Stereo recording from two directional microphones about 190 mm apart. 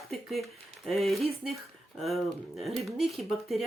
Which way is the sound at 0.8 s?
Centre (ahead or behind).